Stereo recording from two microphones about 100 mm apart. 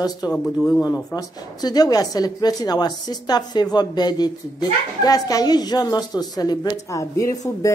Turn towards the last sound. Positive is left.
turn(degrees=30)  # may be behind; listen again after turning